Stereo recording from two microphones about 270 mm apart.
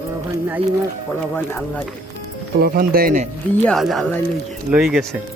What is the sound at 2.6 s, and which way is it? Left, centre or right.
Speech, right.